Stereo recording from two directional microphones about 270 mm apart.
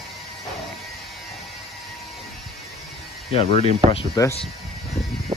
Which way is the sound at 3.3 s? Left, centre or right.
Left.